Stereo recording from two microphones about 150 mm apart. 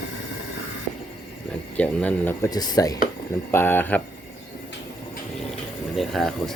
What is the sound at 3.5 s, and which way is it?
Speech, 15° left (ahead or behind).